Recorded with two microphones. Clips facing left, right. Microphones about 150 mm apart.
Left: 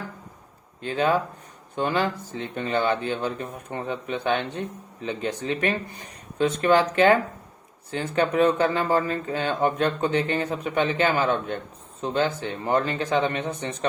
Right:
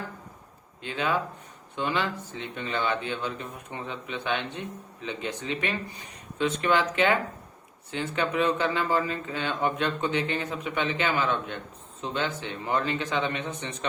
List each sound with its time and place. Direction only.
0.8 s speech: 40° left (ahead or behind)